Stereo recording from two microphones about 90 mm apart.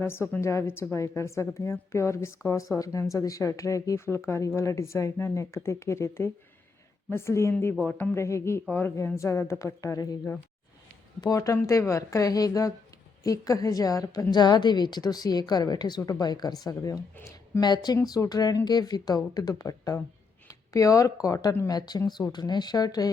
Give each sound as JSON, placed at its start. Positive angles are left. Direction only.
{"t": 0.0, "sound": "a woman's voice", "side_deg": 25}
{"t": 7.9, "sound": "speech", "side_deg": 15}
{"t": 8.1, "sound": "speech", "side_deg": 30}
{"t": 11.2, "sound": "a woman's voice", "side_deg": 40}